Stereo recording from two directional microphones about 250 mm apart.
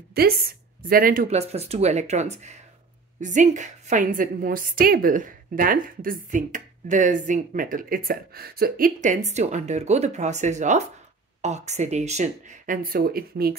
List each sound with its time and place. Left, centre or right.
0.2 s a woman's voice: right